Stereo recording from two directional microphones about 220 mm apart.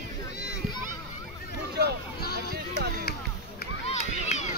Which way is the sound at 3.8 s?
30° left (ahead or behind).